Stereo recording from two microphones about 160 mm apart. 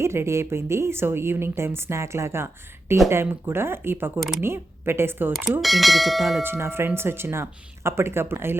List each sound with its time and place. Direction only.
0.0 s a woman's voice: 15° right (ahead or behind)
5.4 s speech: centre (ahead or behind)
6.4 s a woman's voice: 15° right (ahead or behind)